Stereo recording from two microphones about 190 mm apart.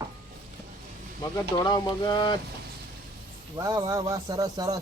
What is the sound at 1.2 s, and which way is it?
Speech, 20° left (ahead or behind).